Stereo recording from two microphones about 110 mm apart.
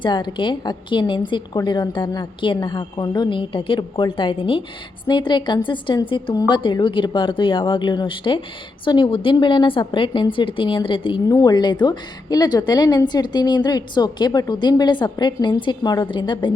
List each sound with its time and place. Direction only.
0.0 s a woman's voice: 45° left (ahead or behind)
11.3 s a woman's voice: 35° left (ahead or behind)